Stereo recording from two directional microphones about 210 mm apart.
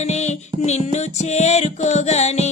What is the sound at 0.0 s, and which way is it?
Music, 30° left (ahead or behind).